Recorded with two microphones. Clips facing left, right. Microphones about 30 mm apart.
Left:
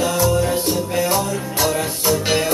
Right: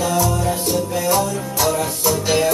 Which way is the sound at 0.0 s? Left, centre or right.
Centre.